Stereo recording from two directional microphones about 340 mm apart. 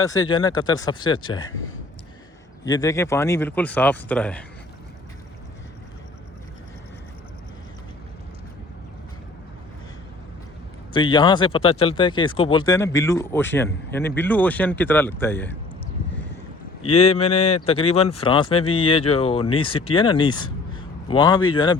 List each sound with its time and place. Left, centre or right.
0.0 s speech: centre
2.6 s speech: centre
10.9 s speech: centre
16.9 s speech: centre